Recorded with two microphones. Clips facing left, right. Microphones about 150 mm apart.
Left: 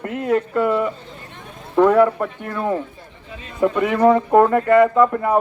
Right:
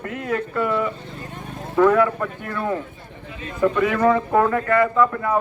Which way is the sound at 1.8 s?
20° left (ahead or behind).